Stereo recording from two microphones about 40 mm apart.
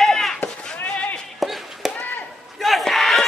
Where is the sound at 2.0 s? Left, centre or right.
Left.